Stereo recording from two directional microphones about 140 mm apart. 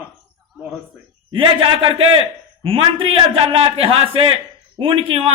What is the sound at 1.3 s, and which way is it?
Speech, 40° right (ahead or behind).